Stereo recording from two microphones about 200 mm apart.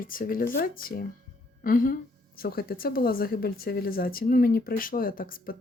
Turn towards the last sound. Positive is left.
turn(degrees=45)  # may be behind; listen again after turning